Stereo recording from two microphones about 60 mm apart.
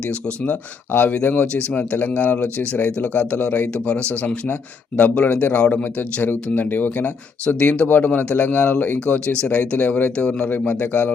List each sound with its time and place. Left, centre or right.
0.1 s speech: left
10.5 s speech: left